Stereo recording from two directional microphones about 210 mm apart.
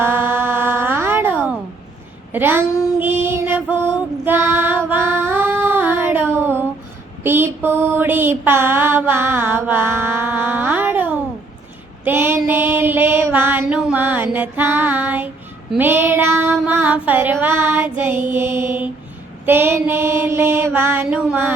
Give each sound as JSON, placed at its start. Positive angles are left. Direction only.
{"t": 0.0, "sound": "a sound", "side_deg": -10}
{"t": 2.3, "sound": "mantra", "side_deg": -10}
{"t": 3.0, "sound": "music", "side_deg": -10}
{"t": 6.3, "sound": "a sound", "side_deg": -10}
{"t": 12.0, "sound": "female singing", "side_deg": -10}
{"t": 15.7, "sound": "mantra", "side_deg": -10}